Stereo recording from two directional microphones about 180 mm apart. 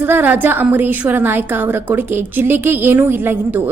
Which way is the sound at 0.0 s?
10° right (ahead or behind).